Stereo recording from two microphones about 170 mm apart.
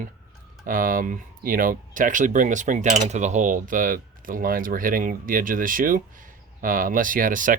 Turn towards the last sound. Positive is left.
turn(degrees=-50)  # may be behind; listen again after turning